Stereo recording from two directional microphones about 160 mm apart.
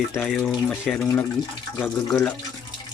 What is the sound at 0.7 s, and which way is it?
Speech, 10° left (ahead or behind).